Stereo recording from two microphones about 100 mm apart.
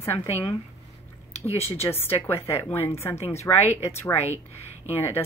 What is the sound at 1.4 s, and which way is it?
Speech, 90° left.